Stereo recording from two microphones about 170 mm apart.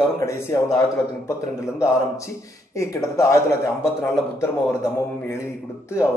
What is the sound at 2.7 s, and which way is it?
A man's voice, 20° left (ahead or behind).